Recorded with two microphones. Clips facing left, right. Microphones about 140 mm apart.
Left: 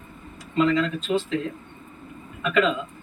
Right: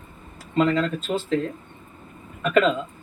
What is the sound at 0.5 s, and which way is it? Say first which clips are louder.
Speech: even; 45° right (ahead or behind).